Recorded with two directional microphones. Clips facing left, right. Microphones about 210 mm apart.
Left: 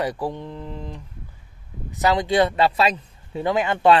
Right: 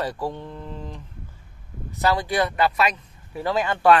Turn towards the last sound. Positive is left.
turn(degrees=20)  # may be behind; listen again after turning